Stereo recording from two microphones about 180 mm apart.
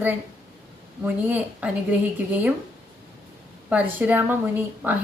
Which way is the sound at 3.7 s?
10° right (ahead or behind).